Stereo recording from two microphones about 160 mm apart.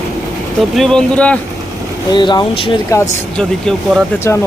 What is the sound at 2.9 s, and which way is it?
Speech, 20° left (ahead or behind).